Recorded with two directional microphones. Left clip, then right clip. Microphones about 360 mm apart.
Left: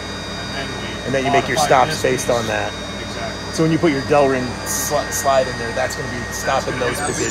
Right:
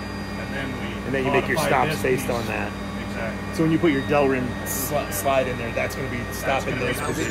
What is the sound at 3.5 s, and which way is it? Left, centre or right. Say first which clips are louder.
Speech: left 4 dB; left.